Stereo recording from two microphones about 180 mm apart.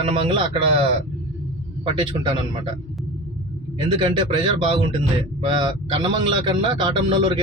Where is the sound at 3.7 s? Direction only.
30° right (ahead or behind).